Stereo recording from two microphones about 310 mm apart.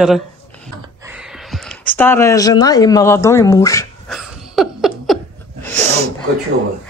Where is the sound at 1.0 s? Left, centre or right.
Centre.